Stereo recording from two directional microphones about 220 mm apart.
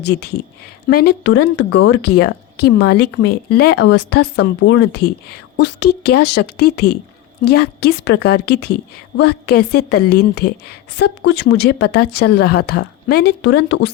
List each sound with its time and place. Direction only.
0.0 s a woman's voice: 50° left (ahead or behind)